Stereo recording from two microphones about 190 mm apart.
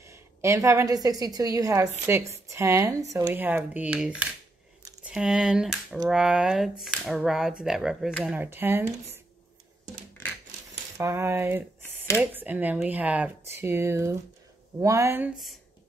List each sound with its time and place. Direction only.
0.0 s a woman's voice: 15° right (ahead or behind)
11.0 s a woman's voice: 15° right (ahead or behind)